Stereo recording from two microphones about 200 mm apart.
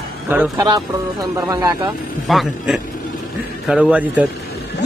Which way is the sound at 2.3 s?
Centre (ahead or behind).